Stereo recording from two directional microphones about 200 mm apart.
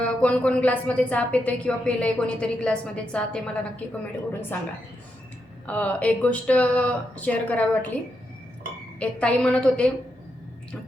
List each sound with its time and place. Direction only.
0.0 s a woman's voice: 5° left (ahead or behind)
5.6 s speech: 5° left (ahead or behind)
9.0 s a woman's voice: 5° left (ahead or behind)